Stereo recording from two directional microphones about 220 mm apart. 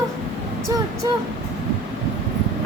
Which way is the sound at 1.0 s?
15° right (ahead or behind).